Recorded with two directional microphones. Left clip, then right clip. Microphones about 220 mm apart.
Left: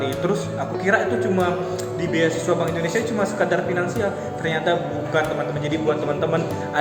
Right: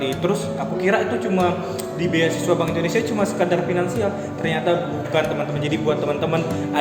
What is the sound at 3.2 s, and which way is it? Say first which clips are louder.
Speech: even; 10° right (ahead or behind).